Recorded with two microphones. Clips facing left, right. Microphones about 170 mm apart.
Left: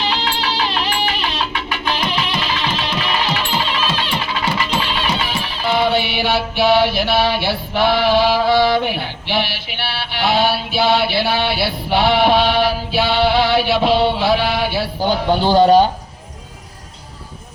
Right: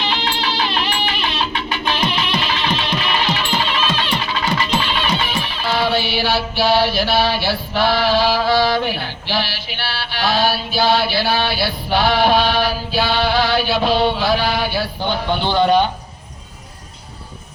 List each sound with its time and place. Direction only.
0.0 s music: 35° left (ahead or behind)
5.7 s mantra: 20° left (ahead or behind)
15.0 s speech: 40° left (ahead or behind)